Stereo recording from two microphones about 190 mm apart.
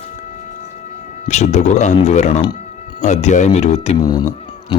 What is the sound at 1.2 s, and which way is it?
Speech, 35° left (ahead or behind).